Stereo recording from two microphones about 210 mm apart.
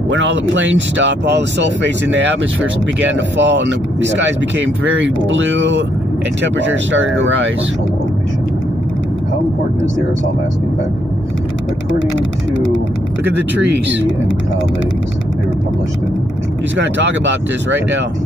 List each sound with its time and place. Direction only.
0.1 s speech: 65° right (ahead or behind)
13.3 s speech: 60° right (ahead or behind)
16.7 s speech: 60° right (ahead or behind)